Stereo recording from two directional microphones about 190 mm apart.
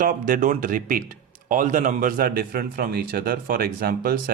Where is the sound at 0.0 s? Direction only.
45° right (ahead or behind).